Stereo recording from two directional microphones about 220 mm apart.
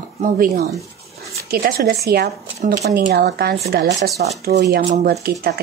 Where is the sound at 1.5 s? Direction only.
45° right (ahead or behind).